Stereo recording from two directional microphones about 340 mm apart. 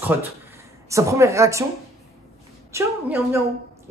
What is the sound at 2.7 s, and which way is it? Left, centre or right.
Speech, centre.